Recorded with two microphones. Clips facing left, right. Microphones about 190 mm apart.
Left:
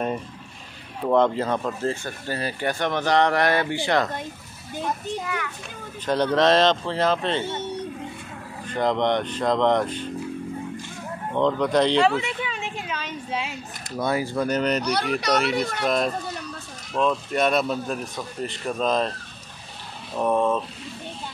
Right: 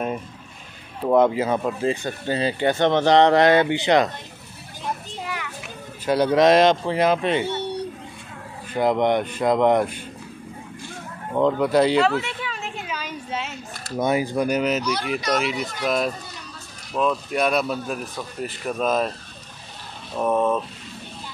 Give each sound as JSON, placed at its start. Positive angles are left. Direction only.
{"t": 1.0, "sound": "speech", "side_deg": -10}
{"t": 6.0, "sound": "speech", "side_deg": -10}
{"t": 8.6, "sound": "speech", "side_deg": -10}
{"t": 11.3, "sound": "a sound", "side_deg": -5}
{"t": 13.9, "sound": "speech", "side_deg": -20}
{"t": 20.2, "sound": "speech", "side_deg": -5}